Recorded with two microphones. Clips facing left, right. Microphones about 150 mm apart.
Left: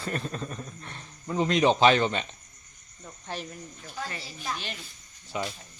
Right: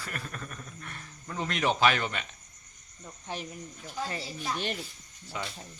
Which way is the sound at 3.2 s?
15° right (ahead or behind).